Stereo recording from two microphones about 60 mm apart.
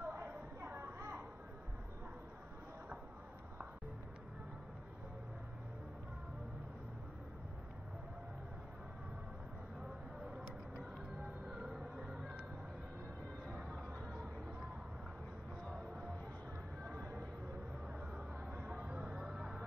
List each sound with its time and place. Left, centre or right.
0.0 s a sound: right
10.2 s vehicle: centre
13.5 s music: centre
16.8 s music: right
18.9 s music: centre
19.2 s a sound: centre